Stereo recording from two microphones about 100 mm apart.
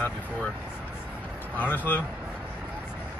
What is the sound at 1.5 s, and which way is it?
Speech, 20° left (ahead or behind).